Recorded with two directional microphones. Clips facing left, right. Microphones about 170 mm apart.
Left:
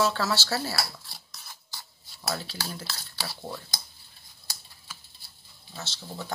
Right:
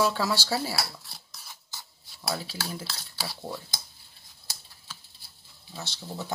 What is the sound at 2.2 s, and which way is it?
Speech, 5° right (ahead or behind).